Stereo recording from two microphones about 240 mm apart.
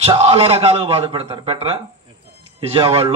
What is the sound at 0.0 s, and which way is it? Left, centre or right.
A man's voice, right.